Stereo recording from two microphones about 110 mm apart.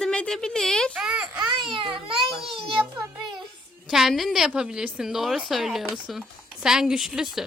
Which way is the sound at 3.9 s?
5° right (ahead or behind).